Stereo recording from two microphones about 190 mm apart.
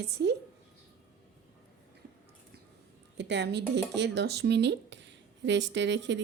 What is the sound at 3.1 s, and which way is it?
Speech, 65° right (ahead or behind).